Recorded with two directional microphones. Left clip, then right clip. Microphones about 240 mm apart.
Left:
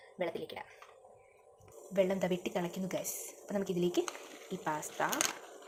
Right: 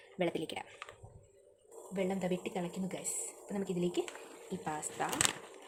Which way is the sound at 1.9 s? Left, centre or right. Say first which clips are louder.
Left 5 dB; centre.